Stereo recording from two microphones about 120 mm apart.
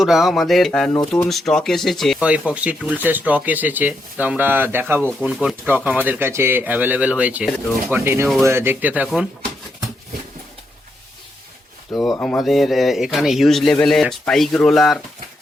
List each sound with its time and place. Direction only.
0.0 s a man's voice: centre (ahead or behind)
2.2 s a man's voice: 10° right (ahead or behind)
8.0 s speech: 20° right (ahead or behind)
12.2 s a man's voice: 5° left (ahead or behind)